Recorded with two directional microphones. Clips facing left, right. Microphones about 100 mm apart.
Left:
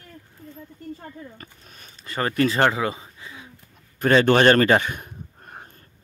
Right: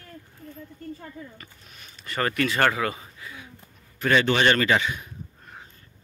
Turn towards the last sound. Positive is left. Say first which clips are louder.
# left 2 dB
turn(degrees=50)  # may be behind; listen again after turning